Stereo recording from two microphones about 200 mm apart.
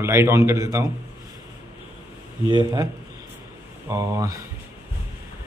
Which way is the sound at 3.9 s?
15° right (ahead or behind).